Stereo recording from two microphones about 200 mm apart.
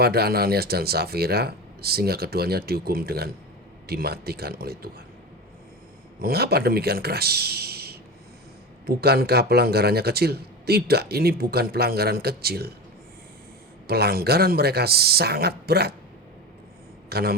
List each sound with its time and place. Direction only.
0.0 s speech: 50° right (ahead or behind)
6.2 s speech: 50° right (ahead or behind)
9.0 s speech: 50° right (ahead or behind)
13.8 s speech: 50° right (ahead or behind)
17.1 s a man's voice: 50° right (ahead or behind)